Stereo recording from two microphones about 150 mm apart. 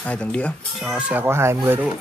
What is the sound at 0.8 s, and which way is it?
Speech, 10° right (ahead or behind).